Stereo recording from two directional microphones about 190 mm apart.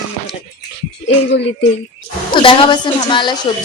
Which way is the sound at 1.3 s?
65° left (ahead or behind).